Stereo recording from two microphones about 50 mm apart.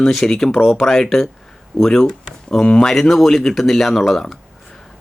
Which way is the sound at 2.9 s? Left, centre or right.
Centre.